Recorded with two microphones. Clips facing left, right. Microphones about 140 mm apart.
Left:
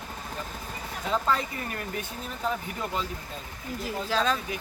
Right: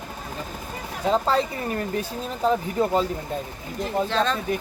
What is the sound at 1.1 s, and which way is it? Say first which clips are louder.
Speech: right 6 dB; 30° right (ahead or behind).